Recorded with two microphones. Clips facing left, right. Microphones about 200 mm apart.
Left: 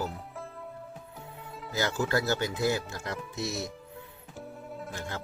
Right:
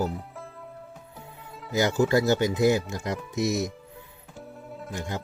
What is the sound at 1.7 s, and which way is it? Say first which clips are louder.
Speech: right 7 dB; 20° right (ahead or behind).